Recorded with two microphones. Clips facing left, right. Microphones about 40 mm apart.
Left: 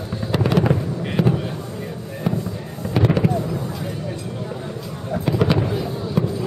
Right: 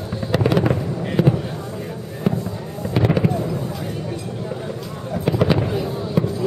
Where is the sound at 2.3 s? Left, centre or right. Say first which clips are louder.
Right 2 dB; centre.